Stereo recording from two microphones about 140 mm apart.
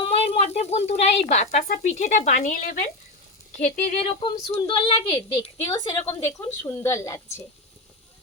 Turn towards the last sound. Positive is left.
turn(degrees=20)  # may be behind; listen again after turning